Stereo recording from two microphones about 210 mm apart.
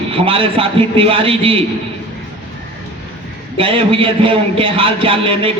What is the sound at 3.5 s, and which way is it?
A man's voice, 25° right (ahead or behind).